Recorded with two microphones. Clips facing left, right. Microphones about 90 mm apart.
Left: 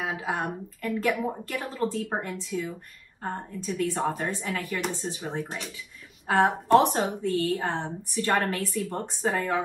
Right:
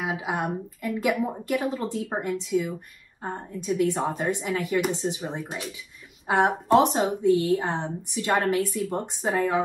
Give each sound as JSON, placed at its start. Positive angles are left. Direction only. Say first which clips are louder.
{"t": 0.0, "sound": "a woman's voice", "louder": "right 2 dB", "side_deg": -15}